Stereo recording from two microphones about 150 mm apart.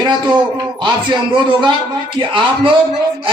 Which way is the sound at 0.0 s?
30° right (ahead or behind).